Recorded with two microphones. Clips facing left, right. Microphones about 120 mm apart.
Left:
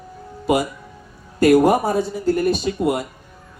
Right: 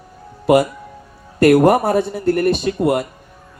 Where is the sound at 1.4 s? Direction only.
65° right (ahead or behind).